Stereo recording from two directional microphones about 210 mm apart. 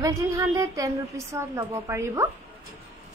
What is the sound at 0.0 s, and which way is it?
A woman's voice, 15° right (ahead or behind).